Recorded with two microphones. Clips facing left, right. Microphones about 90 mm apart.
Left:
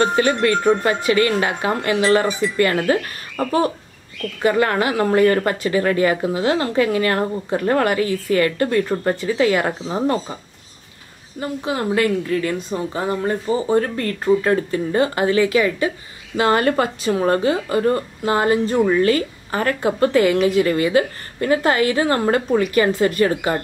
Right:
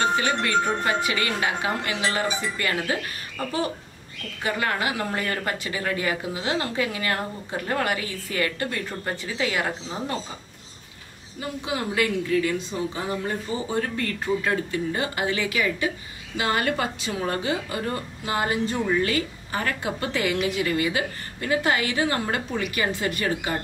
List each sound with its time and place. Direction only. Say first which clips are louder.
0.2 s a woman's voice: left 6 dB; 50° left (ahead or behind)
11.3 s a woman's voice: left 6 dB; 45° left (ahead or behind)